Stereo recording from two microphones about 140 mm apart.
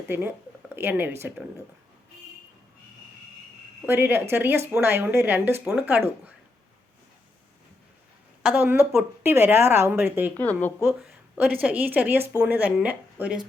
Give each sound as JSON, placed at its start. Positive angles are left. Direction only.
{"t": 0.1, "sound": "speech", "side_deg": -15}
{"t": 3.8, "sound": "speech", "side_deg": -15}
{"t": 8.4, "sound": "speech", "side_deg": -10}
{"t": 10.3, "sound": "speech", "side_deg": 10}
{"t": 11.6, "sound": "speech", "side_deg": -10}